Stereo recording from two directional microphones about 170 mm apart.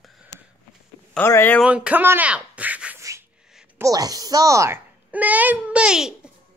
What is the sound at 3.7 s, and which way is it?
A child's voice, 20° right (ahead or behind).